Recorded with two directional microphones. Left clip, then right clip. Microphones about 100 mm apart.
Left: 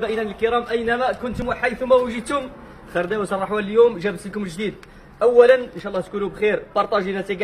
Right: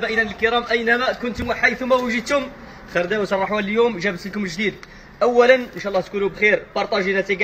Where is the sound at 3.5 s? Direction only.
35° left (ahead or behind).